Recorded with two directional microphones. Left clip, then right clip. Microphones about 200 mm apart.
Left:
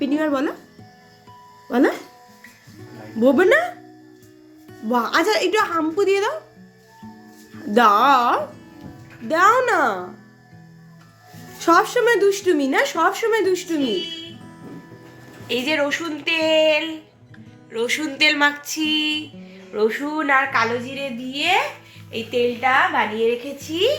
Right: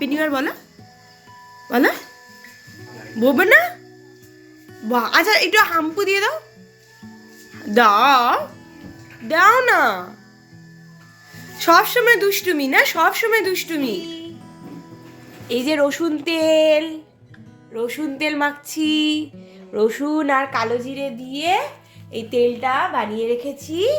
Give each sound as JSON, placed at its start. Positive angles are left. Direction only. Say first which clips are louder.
{"t": 0.0, "sound": "speech", "louder": "right 1 dB", "side_deg": 0}
{"t": 1.6, "sound": "speech", "louder": "right 2 dB", "side_deg": 0}
{"t": 3.2, "sound": "speech", "louder": "right 2 dB", "side_deg": 0}
{"t": 4.8, "sound": "speech", "louder": "right 2 dB", "side_deg": 0}
{"t": 7.5, "sound": "speech", "louder": "right 1 dB", "side_deg": 5}
{"t": 11.4, "sound": "speech", "louder": "right 2 dB", "side_deg": 0}
{"t": 15.4, "sound": "a woman's voice", "louder": "right 2 dB", "side_deg": -65}
{"t": 17.7, "sound": "music", "louder": "left 2 dB", "side_deg": -45}
{"t": 19.7, "sound": "a woman's voice", "louder": "right 2 dB", "side_deg": -65}